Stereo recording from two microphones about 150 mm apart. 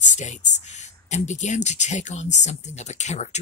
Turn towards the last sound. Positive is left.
turn(degrees=50)  # may be behind; listen again after turning